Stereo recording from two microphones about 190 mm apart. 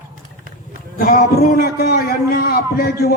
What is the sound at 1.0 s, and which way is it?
A man's voice, 50° left (ahead or behind).